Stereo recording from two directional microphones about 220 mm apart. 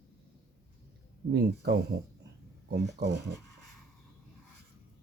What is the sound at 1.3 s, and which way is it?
Speech, 45° right (ahead or behind).